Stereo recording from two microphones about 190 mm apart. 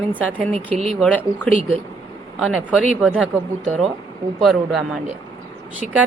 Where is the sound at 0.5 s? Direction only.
35° right (ahead or behind).